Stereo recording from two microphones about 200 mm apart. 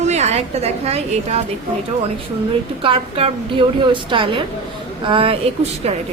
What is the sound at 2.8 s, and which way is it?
A woman's voice, 30° right (ahead or behind).